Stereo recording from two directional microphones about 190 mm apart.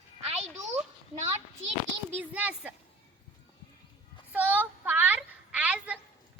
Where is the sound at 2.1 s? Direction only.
5° right (ahead or behind).